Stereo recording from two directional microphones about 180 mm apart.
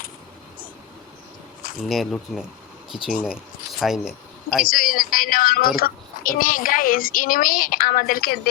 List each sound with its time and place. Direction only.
1.8 s speech: centre (ahead or behind)
4.6 s a woman's voice: 50° left (ahead or behind)